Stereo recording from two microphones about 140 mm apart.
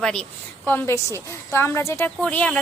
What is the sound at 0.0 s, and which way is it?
Speech, 5° left (ahead or behind).